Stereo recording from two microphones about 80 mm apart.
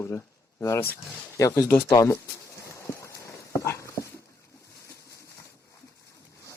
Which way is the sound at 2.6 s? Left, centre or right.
Left.